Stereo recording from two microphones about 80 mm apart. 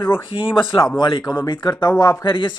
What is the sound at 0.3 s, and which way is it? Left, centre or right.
Speech, left.